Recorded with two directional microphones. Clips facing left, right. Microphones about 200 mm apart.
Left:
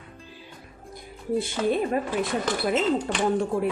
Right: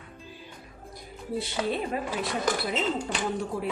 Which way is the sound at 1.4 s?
50° left (ahead or behind).